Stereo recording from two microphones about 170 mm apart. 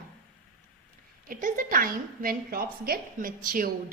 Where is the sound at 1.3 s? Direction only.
50° right (ahead or behind).